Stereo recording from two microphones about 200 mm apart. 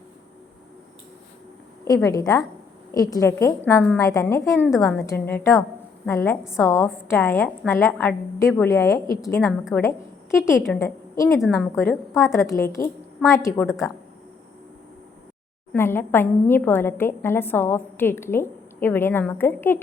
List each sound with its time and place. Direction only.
2.0 s a woman's voice: 15° left (ahead or behind)
9.4 s a woman's voice: centre (ahead or behind)
10.6 s a woman's voice: 10° left (ahead or behind)
15.7 s a woman's voice: 10° left (ahead or behind)